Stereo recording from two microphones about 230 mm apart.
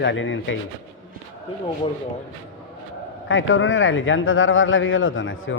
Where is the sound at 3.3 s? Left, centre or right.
Left.